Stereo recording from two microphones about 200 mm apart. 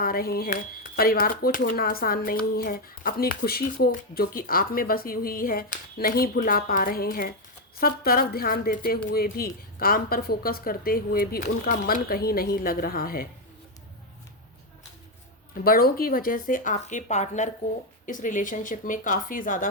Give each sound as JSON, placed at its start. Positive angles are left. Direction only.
{"t": 0.0, "sound": "speech", "side_deg": 45}
{"t": 15.6, "sound": "a woman's voice", "side_deg": 45}